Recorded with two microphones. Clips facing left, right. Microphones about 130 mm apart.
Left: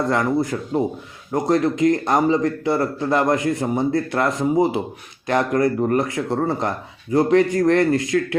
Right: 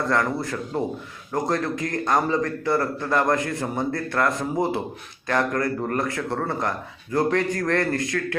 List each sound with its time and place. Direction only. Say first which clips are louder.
0.7 s a man's voice: left 6 dB; 5° left (ahead or behind)
1.3 s a man's voice: left 6 dB; 20° left (ahead or behind)